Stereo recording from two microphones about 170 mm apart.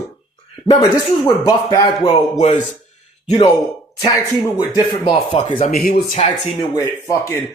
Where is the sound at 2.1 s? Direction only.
30° left (ahead or behind).